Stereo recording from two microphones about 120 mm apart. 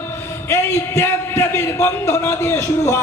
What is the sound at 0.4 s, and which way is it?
A man's voice, 20° left (ahead or behind).